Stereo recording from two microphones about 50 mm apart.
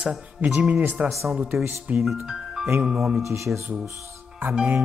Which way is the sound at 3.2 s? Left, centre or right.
Right.